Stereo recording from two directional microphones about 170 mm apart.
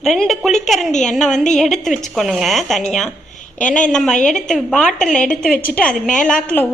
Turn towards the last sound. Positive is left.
turn(degrees=10)  # may be behind; listen again after turning